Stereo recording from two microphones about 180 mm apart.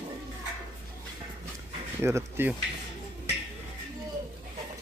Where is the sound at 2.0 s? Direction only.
15° right (ahead or behind).